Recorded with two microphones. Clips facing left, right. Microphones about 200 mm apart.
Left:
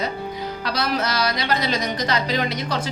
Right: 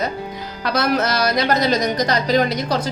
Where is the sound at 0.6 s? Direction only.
50° right (ahead or behind).